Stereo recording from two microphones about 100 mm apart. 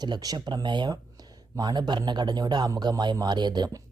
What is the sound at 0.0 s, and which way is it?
Speech, 40° right (ahead or behind).